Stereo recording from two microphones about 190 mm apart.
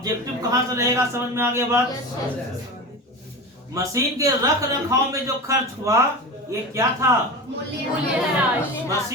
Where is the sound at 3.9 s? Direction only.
15° right (ahead or behind).